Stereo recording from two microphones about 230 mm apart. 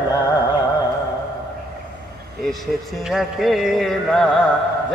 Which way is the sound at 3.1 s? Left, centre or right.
Centre.